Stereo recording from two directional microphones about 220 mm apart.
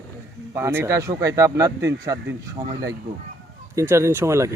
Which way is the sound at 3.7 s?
15° right (ahead or behind).